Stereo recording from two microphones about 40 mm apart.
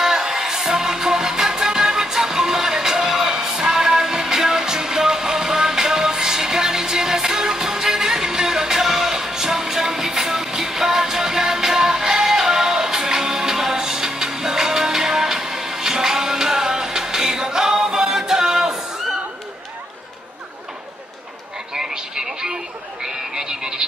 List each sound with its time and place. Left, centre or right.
0.0 s music: centre
21.7 s a sound: centre
23.0 s frog: centre